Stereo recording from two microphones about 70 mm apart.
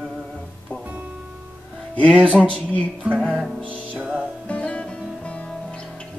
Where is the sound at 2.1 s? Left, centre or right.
Right.